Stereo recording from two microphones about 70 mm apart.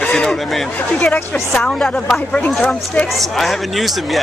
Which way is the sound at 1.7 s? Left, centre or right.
Centre.